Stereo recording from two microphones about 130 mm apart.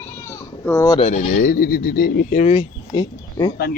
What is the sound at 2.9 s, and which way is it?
Speech, 30° left (ahead or behind).